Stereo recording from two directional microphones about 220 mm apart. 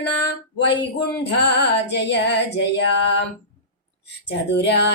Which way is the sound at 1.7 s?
55° left (ahead or behind).